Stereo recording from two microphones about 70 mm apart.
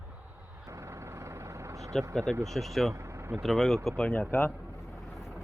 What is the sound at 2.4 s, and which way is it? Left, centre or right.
Speech, centre.